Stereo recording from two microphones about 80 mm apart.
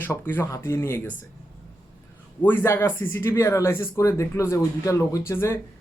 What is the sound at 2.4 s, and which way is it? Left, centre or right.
A man's voice, left.